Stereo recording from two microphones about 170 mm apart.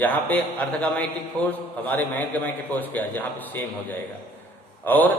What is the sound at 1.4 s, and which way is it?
Speech, 25° right (ahead or behind).